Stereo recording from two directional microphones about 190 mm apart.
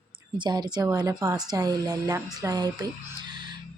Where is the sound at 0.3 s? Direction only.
25° right (ahead or behind).